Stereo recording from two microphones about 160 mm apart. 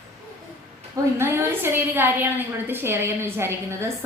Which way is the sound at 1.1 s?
15° right (ahead or behind).